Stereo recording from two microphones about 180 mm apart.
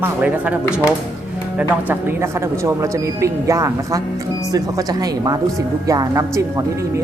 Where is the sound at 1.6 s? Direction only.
10° right (ahead or behind).